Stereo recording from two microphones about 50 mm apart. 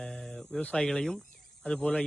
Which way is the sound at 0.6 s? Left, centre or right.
Left.